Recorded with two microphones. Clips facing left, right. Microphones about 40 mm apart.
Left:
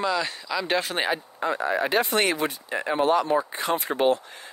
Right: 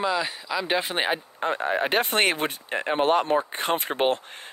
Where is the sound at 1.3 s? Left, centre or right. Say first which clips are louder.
Even; right.